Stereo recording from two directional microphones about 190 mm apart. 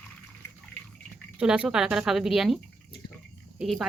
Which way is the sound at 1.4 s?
5° right (ahead or behind).